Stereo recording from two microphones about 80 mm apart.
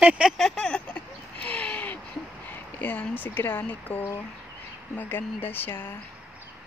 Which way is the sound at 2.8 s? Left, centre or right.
Left.